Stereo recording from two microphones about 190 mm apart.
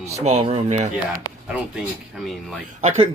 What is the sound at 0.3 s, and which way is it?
Speech, 30° right (ahead or behind).